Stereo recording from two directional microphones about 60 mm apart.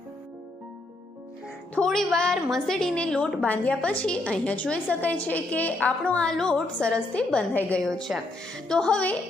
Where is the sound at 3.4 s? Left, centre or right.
Left.